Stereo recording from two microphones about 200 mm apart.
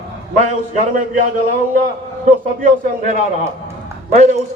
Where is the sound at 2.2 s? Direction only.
40° right (ahead or behind).